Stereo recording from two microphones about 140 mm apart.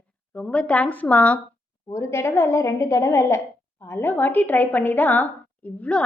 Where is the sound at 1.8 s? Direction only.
20° left (ahead or behind).